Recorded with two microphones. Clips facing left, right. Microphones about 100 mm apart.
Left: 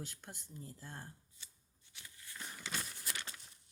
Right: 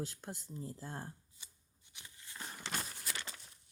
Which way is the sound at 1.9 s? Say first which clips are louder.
Even; 20° right (ahead or behind).